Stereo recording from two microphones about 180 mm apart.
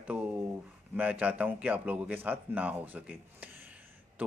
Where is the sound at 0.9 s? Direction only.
10° right (ahead or behind).